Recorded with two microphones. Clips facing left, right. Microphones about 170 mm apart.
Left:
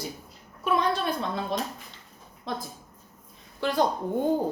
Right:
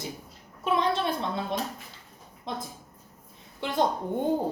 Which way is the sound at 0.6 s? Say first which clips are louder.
Even; 25° right (ahead or behind).